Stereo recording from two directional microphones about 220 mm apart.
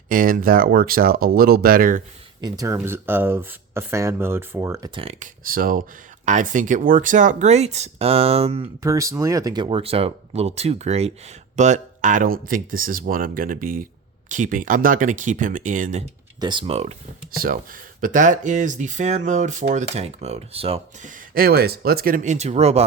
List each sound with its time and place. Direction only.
0.1 s speech: 40° right (ahead or behind)
2.4 s speech: 15° right (ahead or behind)
4.9 s speech: 30° right (ahead or behind)
5.5 s speech: 40° right (ahead or behind)
8.8 s speech: 15° right (ahead or behind); by 16.0 s 35° right (ahead or behind)
16.4 s speech: 20° right (ahead or behind)
17.3 s speech: 40° right (ahead or behind)